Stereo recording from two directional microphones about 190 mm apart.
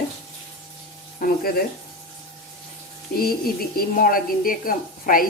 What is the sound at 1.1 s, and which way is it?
Speech, 50° left (ahead or behind).